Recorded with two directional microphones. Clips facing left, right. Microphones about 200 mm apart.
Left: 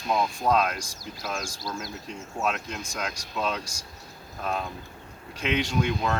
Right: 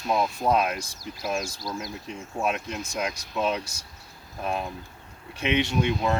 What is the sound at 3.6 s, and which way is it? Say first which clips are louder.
Speech: left 2 dB; 60° right (ahead or behind).